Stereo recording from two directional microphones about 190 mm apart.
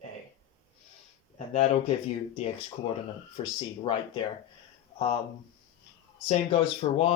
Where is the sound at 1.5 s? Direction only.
35° left (ahead or behind).